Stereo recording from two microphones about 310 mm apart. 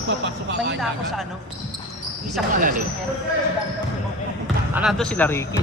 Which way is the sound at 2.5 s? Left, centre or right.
Right.